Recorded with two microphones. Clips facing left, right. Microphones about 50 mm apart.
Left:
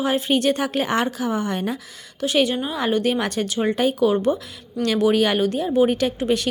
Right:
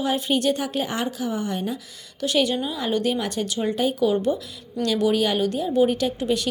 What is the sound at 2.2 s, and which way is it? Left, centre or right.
Speech, left.